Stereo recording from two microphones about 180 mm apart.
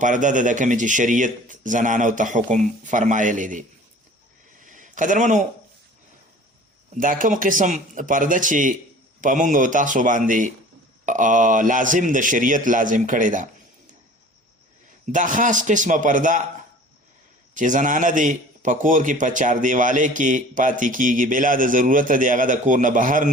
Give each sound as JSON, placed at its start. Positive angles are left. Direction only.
{"t": 0.0, "sound": "a man's voice", "side_deg": -45}
{"t": 4.6, "sound": "a sound", "side_deg": -45}
{"t": 6.9, "sound": "a man's voice", "side_deg": -50}
{"t": 15.1, "sound": "a man's voice", "side_deg": -45}
{"t": 17.5, "sound": "a man's voice", "side_deg": -45}